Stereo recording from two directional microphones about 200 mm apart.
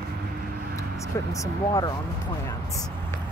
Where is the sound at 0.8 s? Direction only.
15° left (ahead or behind).